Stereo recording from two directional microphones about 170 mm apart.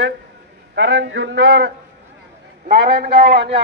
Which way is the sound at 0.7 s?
90° right.